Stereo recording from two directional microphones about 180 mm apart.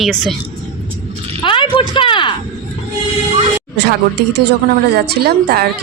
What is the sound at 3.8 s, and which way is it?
A woman's voice, 65° right (ahead or behind).